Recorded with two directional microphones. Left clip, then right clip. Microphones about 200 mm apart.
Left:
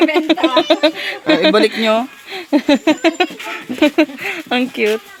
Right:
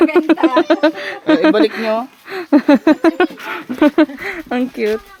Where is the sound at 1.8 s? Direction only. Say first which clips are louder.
Left 3 dB; 35° left (ahead or behind).